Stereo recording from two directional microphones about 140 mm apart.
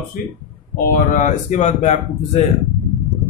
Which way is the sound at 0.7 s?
80° left.